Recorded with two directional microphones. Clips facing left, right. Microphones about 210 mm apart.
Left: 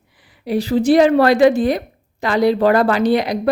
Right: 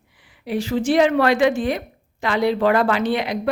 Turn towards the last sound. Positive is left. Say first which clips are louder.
# left 5 dB
turn(degrees=40)  # may be behind; listen again after turning